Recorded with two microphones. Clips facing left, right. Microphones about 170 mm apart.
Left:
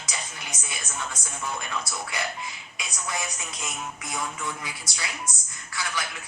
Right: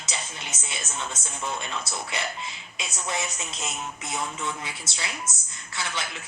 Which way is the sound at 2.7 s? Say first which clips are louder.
Right 2 dB; 25° right (ahead or behind).